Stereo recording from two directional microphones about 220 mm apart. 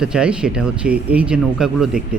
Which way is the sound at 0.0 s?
5° right (ahead or behind).